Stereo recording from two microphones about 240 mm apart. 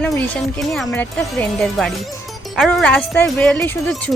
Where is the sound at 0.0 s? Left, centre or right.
Centre.